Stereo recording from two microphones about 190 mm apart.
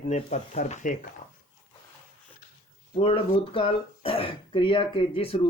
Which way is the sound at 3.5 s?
30° left (ahead or behind).